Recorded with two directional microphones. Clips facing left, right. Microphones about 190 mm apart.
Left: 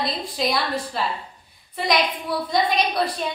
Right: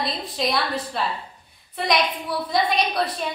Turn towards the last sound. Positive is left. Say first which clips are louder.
# left 1 dB
turn(degrees=0)  # may be behind; listen again after turning